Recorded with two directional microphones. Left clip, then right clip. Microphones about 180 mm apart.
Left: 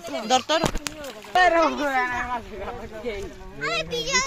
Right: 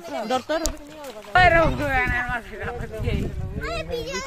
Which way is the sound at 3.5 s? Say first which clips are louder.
Left 3 dB; 35° right (ahead or behind).